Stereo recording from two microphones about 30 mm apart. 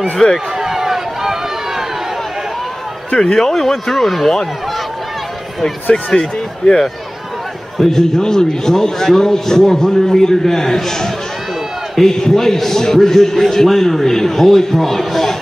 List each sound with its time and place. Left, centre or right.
0.2 s a man's voice: centre
0.6 s run: centre
3.3 s a man's voice: centre
6.1 s speech: centre
8.0 s a man's voice: left
12.1 s a man's voice: centre